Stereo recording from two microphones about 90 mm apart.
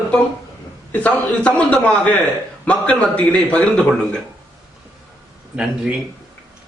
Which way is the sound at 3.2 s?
15° left (ahead or behind).